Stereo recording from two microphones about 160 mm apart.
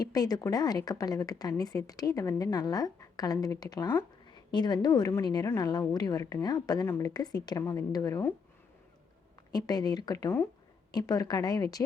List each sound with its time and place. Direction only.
0.0 s a woman's voice: 25° left (ahead or behind)
9.5 s a woman's voice: 25° left (ahead or behind)